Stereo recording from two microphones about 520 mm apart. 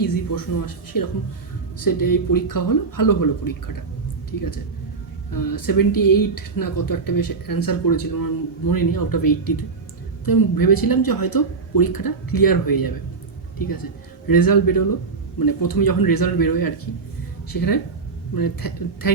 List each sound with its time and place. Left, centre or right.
0.0 s speech: left
14.3 s speech: left